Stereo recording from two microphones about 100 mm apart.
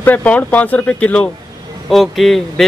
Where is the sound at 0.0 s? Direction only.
15° left (ahead or behind).